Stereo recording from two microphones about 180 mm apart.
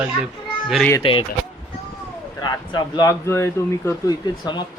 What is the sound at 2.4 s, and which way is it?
Speech, 20° left (ahead or behind).